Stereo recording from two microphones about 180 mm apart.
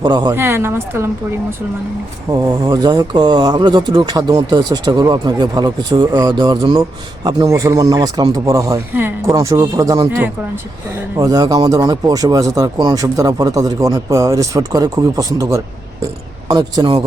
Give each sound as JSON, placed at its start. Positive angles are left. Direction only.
{"t": 0.0, "sound": "speech", "side_deg": -25}
{"t": 0.3, "sound": "speech", "side_deg": -15}
{"t": 2.3, "sound": "speech", "side_deg": -20}